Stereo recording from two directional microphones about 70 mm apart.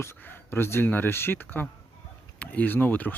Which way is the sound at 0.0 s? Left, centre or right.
Left.